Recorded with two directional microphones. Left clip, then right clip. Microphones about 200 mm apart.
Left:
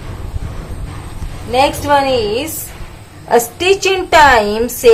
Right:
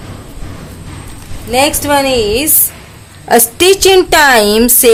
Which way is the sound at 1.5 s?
30° right (ahead or behind).